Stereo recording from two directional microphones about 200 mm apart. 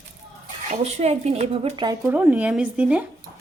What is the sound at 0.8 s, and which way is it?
A woman's voice, 35° right (ahead or behind).